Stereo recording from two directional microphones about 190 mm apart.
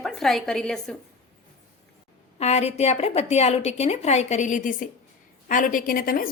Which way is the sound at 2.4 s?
35° left (ahead or behind).